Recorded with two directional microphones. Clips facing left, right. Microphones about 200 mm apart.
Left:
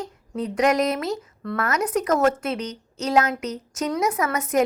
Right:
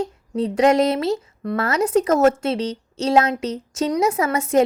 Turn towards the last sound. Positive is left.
turn(degrees=-25)  # may be behind; listen again after turning